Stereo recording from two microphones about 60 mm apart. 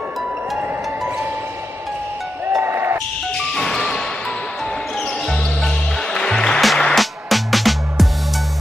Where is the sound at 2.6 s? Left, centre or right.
Right.